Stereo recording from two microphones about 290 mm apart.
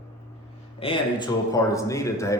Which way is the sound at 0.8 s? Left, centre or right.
Centre.